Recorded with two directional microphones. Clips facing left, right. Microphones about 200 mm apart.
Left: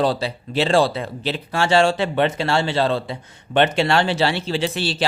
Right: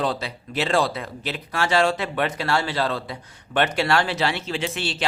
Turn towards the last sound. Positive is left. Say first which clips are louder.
# left 5 dB
turn(degrees=35)  # may be behind; listen again after turning